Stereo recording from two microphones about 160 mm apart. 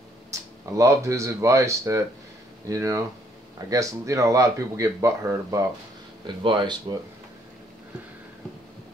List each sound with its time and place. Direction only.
0.3 s speech: 20° right (ahead or behind)
6.2 s speech: 30° right (ahead or behind)